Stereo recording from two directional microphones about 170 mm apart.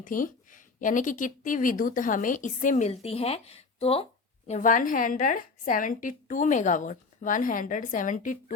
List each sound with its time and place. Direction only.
0.0 s a woman's voice: 50° left (ahead or behind)